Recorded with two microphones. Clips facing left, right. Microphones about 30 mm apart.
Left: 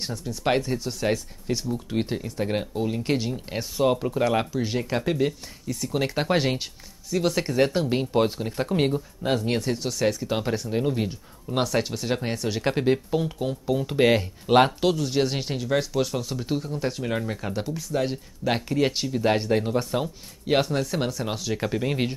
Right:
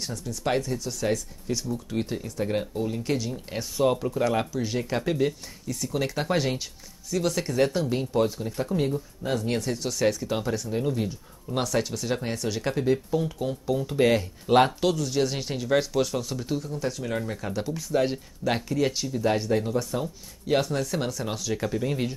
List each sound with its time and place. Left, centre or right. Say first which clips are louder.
0.0 s speech: left 3 dB; left
5.9 s speech: left 3 dB; left
9.4 s speech: left 2 dB; left
9.9 s speech: right 2 dB; centre
10.4 s speech: left 3 dB; left
12.7 s speech: even; left
13.4 s speech: left 1 dB; centre
15.6 s speech: right 1 dB; centre
16.4 s speech: left 2 dB; left
17.7 s speech: right 4 dB; centre
18.4 s speech: left 2 dB; left
20.8 s speech: left 2 dB; centre